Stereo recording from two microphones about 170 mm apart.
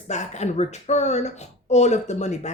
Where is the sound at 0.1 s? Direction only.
40° left (ahead or behind).